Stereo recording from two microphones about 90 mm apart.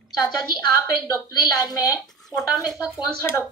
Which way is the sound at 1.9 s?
Centre (ahead or behind).